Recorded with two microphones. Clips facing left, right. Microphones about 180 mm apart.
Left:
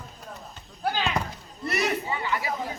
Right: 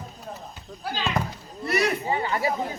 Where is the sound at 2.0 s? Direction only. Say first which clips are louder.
Right 4 dB; 40° right (ahead or behind).